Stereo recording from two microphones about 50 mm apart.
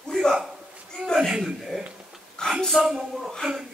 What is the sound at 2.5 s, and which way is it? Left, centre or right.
Speech, centre.